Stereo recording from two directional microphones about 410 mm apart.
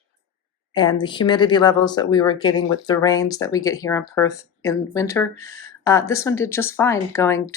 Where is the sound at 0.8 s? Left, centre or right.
Centre.